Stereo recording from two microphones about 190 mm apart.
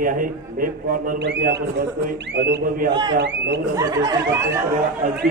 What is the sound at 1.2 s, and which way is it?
A man's voice, 65° right (ahead or behind).